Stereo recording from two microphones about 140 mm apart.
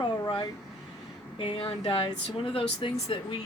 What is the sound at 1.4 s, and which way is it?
Speech, 40° left (ahead or behind).